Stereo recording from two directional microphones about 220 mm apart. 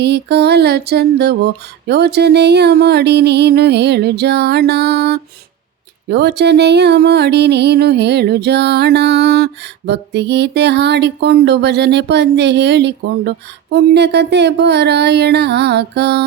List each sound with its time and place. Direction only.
0.0 s music: 50° right (ahead or behind)